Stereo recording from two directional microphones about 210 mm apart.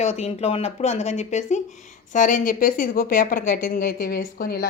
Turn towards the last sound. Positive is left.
turn(degrees=45)  # may be behind; listen again after turning